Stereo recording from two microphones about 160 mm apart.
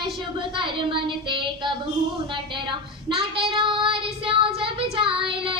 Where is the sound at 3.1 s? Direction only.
35° right (ahead or behind).